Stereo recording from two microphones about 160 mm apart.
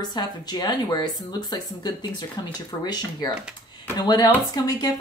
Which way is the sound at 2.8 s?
25° left (ahead or behind).